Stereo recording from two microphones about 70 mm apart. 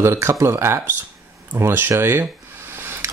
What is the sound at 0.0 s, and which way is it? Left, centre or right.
Speech, right.